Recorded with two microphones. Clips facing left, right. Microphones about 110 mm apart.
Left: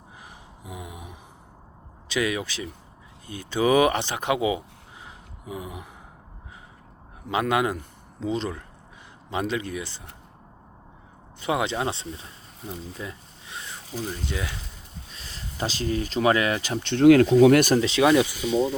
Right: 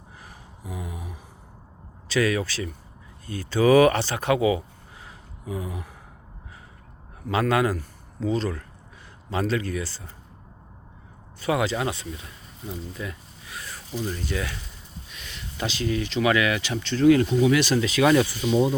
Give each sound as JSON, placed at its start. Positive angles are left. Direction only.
{"t": 0.6, "sound": "a sound", "side_deg": 20}
{"t": 2.0, "sound": "speech", "side_deg": 15}
{"t": 5.0, "sound": "a sound", "side_deg": 20}
{"t": 7.3, "sound": "a man's voice", "side_deg": 20}
{"t": 11.3, "sound": "speech", "side_deg": 20}
{"t": 13.0, "sound": "a sound", "side_deg": 25}
{"t": 14.3, "sound": "speech", "side_deg": 20}
{"t": 15.1, "sound": "speech", "side_deg": 35}
{"t": 16.9, "sound": "speech", "side_deg": 75}
{"t": 17.4, "sound": "speech", "side_deg": 50}
{"t": 17.7, "sound": "speech", "side_deg": 25}
{"t": 18.1, "sound": "speech", "side_deg": 15}